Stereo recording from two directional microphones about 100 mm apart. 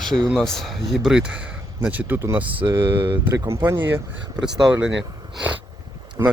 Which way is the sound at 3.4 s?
25° right (ahead or behind).